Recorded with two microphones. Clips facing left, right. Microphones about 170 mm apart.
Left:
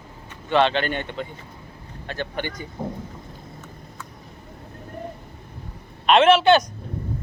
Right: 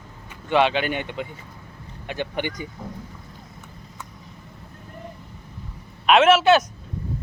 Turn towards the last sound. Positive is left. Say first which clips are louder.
# even
turn(degrees=-5)  # may be behind; listen again after turning